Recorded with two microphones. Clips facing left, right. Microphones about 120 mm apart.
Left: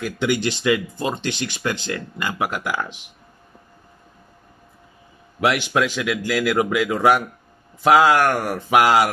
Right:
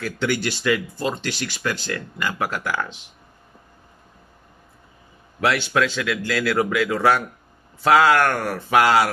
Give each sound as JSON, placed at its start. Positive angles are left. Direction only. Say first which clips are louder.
{"t": 0.0, "sound": "speech", "louder": "left 2 dB", "side_deg": 15}
{"t": 5.4, "sound": "a man's voice", "louder": "left 1 dB", "side_deg": 15}